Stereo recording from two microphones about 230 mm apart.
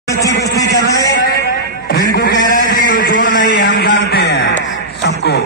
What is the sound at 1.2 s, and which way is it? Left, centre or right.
Music, left.